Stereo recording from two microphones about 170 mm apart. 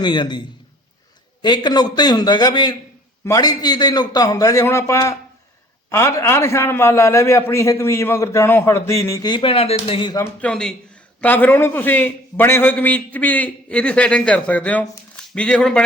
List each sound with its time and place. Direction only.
0.0 s a man's voice: 25° left (ahead or behind)
10.4 s a man's voice: 5° left (ahead or behind)